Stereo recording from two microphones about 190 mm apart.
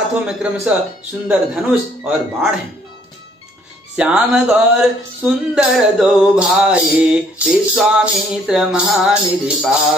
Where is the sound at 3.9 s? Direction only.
5° right (ahead or behind).